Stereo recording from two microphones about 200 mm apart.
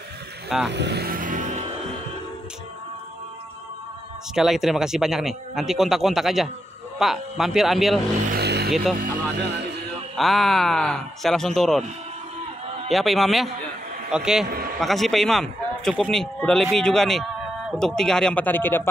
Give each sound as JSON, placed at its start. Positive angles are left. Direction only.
{"t": 0.7, "sound": "vehicle", "side_deg": -60}
{"t": 4.4, "sound": "speech", "side_deg": 0}
{"t": 8.4, "sound": "vehicle", "side_deg": -55}
{"t": 8.9, "sound": "speech", "side_deg": -50}
{"t": 10.1, "sound": "speech", "side_deg": 0}
{"t": 12.9, "sound": "speech", "side_deg": 0}